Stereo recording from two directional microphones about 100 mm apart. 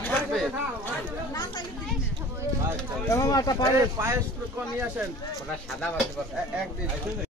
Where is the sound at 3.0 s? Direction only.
30° left (ahead or behind).